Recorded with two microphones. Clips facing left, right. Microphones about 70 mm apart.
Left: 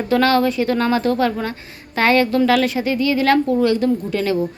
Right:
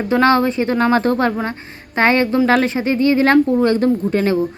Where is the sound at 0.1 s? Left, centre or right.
Right.